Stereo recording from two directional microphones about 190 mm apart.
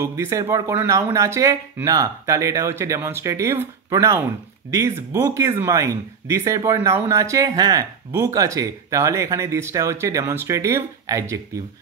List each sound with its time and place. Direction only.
0.0 s speech: 15° right (ahead or behind)